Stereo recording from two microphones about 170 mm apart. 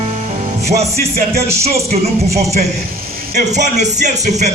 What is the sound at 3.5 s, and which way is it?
Speech, 45° right (ahead or behind).